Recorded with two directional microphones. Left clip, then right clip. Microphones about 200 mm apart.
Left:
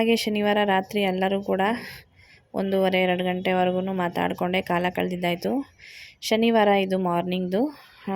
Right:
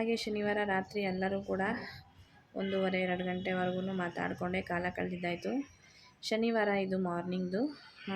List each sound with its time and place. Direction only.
0.0 s speech: 45° left (ahead or behind)